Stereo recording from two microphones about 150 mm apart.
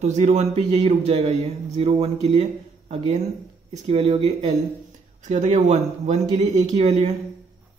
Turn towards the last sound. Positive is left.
turn(degrees=-45)  # may be behind; listen again after turning